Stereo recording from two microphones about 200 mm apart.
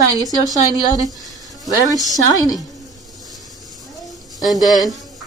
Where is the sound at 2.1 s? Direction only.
20° left (ahead or behind).